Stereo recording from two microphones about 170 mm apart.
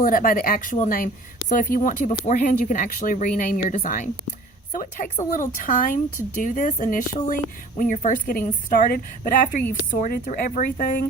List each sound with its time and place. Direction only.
0.0 s speech: 55° left (ahead or behind)